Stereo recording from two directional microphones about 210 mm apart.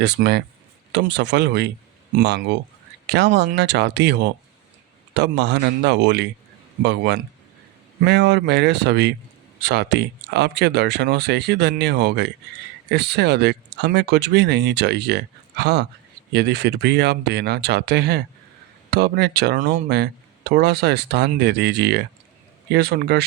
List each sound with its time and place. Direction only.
0.0 s speech: 55° right (ahead or behind)